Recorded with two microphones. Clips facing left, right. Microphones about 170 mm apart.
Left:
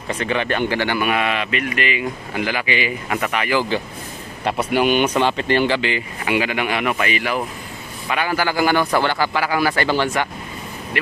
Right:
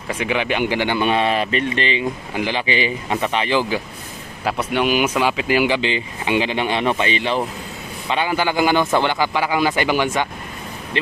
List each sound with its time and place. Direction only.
0.1 s speech: 10° right (ahead or behind); by 3.6 s 25° right (ahead or behind)
4.5 s speech: centre (ahead or behind)
5.8 s speech: 20° right (ahead or behind)